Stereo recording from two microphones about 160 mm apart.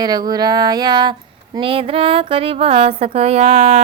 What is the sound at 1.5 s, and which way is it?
Speech, 35° right (ahead or behind).